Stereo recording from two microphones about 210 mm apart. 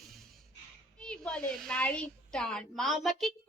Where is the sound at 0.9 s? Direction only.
5° left (ahead or behind).